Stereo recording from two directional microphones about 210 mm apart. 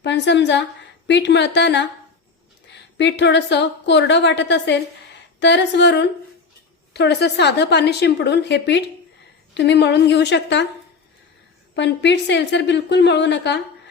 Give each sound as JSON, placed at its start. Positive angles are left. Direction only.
{"t": 0.0, "sound": "a woman's voice", "side_deg": 55}
{"t": 3.0, "sound": "a woman's voice", "side_deg": 55}
{"t": 11.7, "sound": "a woman's voice", "side_deg": 55}